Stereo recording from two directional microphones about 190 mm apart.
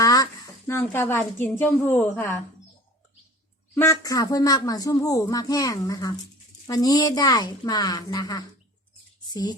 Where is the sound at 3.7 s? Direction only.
15° left (ahead or behind).